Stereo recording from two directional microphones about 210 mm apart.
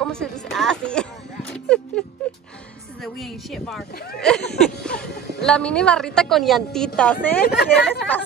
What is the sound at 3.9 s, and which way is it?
Speech, 50° left (ahead or behind).